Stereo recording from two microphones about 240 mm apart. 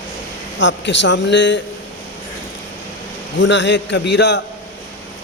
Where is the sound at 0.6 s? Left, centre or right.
Left.